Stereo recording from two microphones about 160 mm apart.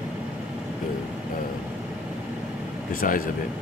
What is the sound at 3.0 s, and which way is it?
Speech, 60° left (ahead or behind).